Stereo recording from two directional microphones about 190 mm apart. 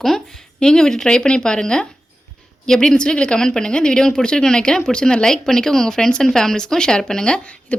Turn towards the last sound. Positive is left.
turn(degrees=5)  # may be behind; listen again after turning